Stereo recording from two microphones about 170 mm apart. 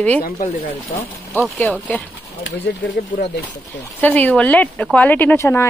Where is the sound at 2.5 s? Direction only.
90° left.